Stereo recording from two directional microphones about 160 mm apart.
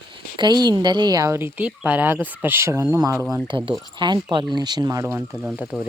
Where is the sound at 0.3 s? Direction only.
25° right (ahead or behind).